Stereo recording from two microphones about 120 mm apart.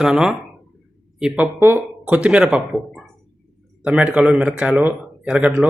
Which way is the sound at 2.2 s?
10° right (ahead or behind).